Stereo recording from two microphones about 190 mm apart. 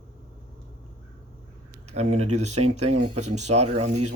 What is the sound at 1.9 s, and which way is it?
Speech, 35° right (ahead or behind).